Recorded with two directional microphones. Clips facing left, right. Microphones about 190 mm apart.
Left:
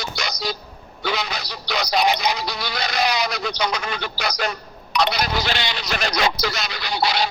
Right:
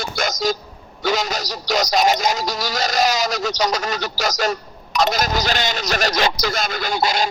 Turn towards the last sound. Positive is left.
turn(degrees=-45)  # may be behind; listen again after turning